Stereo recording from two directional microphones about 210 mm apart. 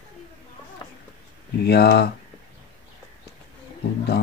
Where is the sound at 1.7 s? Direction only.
50° left (ahead or behind).